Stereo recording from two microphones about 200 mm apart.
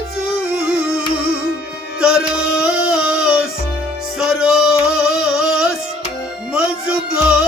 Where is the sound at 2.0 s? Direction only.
5° right (ahead or behind).